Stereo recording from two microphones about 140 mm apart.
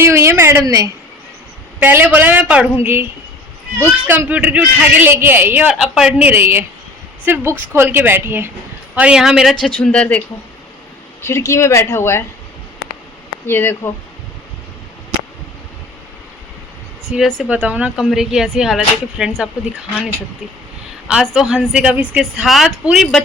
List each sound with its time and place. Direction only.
0.0 s a woman's voice: 20° right (ahead or behind)
1.8 s a man's voice: 15° right (ahead or behind)
5.7 s a man's voice: centre (ahead or behind)
11.2 s speech: 20° left (ahead or behind)
13.5 s speech: 15° left (ahead or behind)
17.1 s a woman's voice: centre (ahead or behind)
21.3 s a woman's voice: centre (ahead or behind)